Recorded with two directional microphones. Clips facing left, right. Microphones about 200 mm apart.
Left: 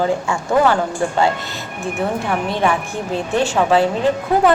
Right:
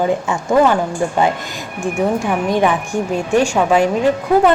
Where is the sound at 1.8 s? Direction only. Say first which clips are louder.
Right 4 dB; 15° right (ahead or behind).